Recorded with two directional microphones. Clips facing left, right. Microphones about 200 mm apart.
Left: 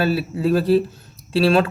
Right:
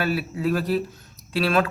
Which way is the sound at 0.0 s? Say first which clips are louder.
Left 4 dB; 30° left (ahead or behind).